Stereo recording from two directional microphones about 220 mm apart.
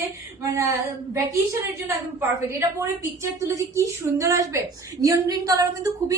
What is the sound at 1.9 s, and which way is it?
A woman's voice, 10° right (ahead or behind).